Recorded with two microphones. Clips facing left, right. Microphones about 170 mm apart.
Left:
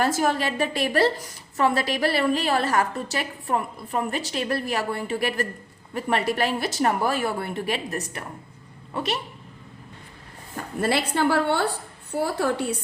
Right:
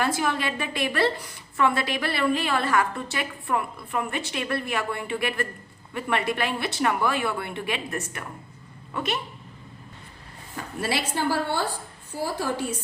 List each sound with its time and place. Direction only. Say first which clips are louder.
0.0 s a woman's voice: left 3 dB; 45° left (ahead or behind)
10.8 s a woman's voice: left 4 dB; 55° left (ahead or behind)